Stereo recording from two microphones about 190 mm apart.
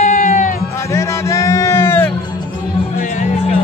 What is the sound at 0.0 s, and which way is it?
Music, 40° left (ahead or behind).